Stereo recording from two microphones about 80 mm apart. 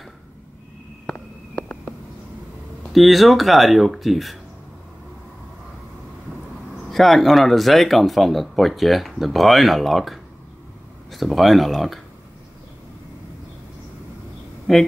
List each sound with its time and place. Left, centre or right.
1.0 s a sound: centre
2.8 s speech: centre
6.9 s speech: centre
14.7 s speech: centre